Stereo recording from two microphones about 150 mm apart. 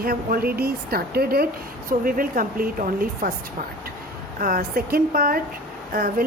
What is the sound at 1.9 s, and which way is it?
Speech, 70° right (ahead or behind).